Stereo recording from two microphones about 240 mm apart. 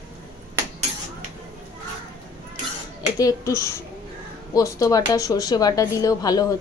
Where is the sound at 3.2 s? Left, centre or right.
Centre.